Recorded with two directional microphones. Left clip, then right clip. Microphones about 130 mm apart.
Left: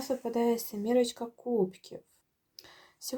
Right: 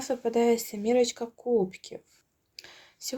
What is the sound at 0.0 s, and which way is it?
Speech, 50° right (ahead or behind).